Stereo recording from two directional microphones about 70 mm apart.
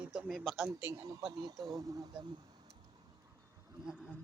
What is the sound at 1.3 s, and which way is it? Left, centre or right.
Speech, right.